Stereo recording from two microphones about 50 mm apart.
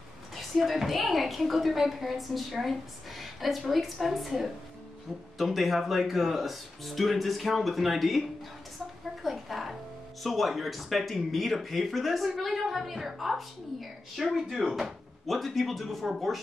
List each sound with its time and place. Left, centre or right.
0.3 s a woman's voice: centre
9.2 s a woman's voice: centre